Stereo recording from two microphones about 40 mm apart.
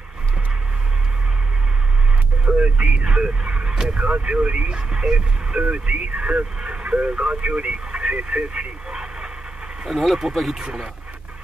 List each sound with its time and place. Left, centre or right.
2.4 s speech: right
4.6 s speech: right
9.8 s speech: centre